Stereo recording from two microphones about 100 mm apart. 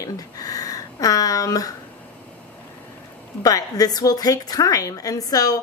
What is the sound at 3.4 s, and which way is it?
A woman's voice, 40° left (ahead or behind).